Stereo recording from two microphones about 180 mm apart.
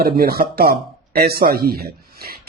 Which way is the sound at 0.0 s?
55° right (ahead or behind).